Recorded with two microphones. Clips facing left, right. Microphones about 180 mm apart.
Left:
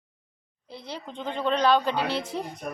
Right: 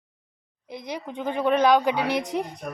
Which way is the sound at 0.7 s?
15° right (ahead or behind).